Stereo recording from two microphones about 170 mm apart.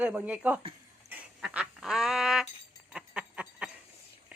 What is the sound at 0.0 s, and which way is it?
Speech, 10° right (ahead or behind).